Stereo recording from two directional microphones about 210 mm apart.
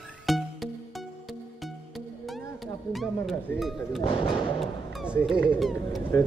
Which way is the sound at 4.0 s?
25° left (ahead or behind).